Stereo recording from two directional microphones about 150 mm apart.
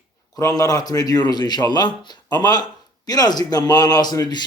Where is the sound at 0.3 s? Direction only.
25° left (ahead or behind).